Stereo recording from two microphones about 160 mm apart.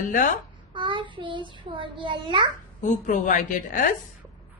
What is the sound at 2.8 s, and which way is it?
A woman's voice, 50° left (ahead or behind).